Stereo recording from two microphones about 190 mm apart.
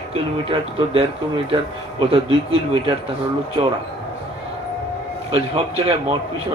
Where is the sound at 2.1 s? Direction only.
30° right (ahead or behind).